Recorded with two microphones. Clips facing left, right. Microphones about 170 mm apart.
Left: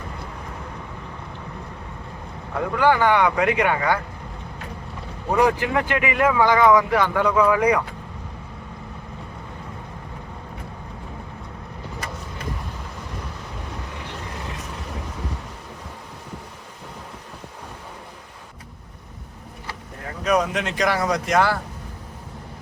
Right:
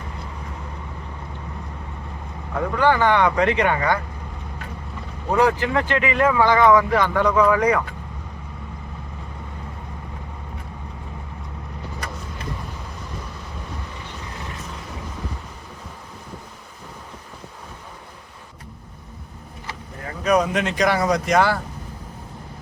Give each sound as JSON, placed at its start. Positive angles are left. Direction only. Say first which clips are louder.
{"t": 2.7, "sound": "speech", "louder": "even", "side_deg": 10}
{"t": 5.3, "sound": "speech", "louder": "right 1 dB", "side_deg": 15}
{"t": 20.2, "sound": "speech", "louder": "right 2 dB", "side_deg": 0}